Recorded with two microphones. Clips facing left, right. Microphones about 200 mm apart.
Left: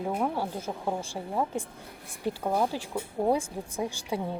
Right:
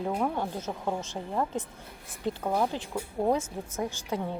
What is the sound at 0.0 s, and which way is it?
Speech, 5° left (ahead or behind).